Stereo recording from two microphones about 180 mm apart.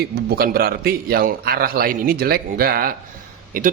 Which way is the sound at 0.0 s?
60° right (ahead or behind).